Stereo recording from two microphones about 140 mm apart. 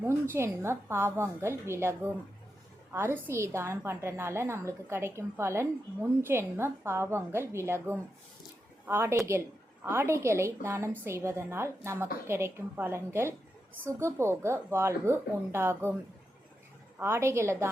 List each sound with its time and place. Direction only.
0.0 s a woman's voice: 20° right (ahead or behind)
17.0 s a woman's voice: 20° right (ahead or behind)